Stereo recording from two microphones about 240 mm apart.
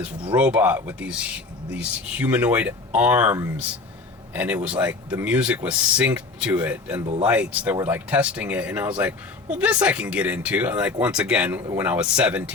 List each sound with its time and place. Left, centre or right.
0.3 s speech: centre
7.0 s speech: right
7.3 s speech: centre